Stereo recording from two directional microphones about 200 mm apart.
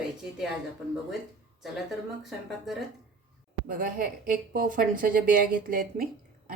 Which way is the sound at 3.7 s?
45° right (ahead or behind).